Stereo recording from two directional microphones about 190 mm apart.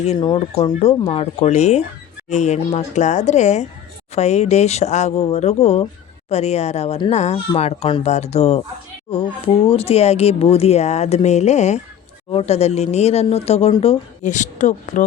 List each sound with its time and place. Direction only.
0.0 s speech: 35° left (ahead or behind)
14.2 s speech: 40° left (ahead or behind)